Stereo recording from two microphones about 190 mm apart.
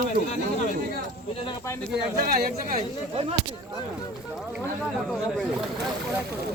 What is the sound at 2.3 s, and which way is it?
Speech, 50° right (ahead or behind).